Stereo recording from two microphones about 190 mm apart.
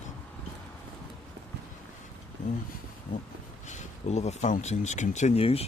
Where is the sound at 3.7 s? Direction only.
35° left (ahead or behind).